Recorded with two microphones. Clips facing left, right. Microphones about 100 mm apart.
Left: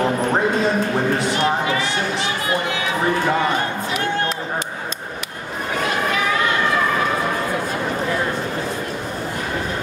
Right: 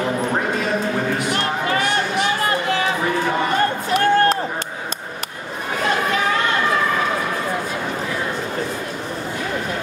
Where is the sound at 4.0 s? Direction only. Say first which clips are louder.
Right 9 dB; 45° right (ahead or behind).